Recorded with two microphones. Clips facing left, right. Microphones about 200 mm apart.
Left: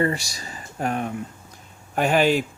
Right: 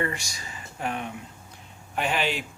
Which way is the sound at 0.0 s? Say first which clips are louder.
Left 7 dB; 35° left (ahead or behind).